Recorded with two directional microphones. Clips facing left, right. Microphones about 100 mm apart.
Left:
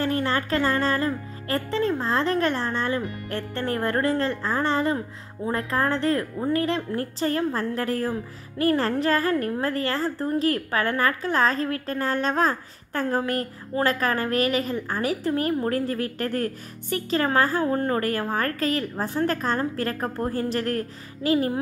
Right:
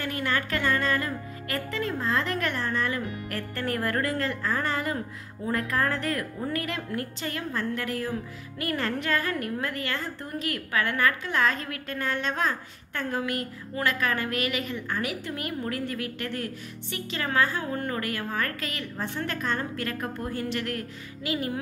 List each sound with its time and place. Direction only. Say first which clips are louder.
0.0 s speech: left 5 dB; 30° left (ahead or behind)